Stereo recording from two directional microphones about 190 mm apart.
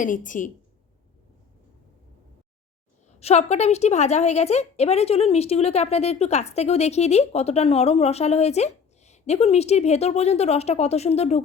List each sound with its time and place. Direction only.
0.0 s a woman's voice: 45° left (ahead or behind)
3.2 s a woman's voice: 35° left (ahead or behind)